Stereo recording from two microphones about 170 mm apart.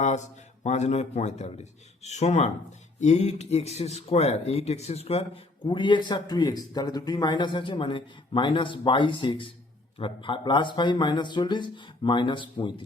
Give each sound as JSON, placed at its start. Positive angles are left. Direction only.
{"t": 0.6, "sound": "speech", "side_deg": 40}